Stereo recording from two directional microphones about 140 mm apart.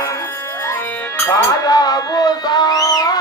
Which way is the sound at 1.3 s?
25° left (ahead or behind).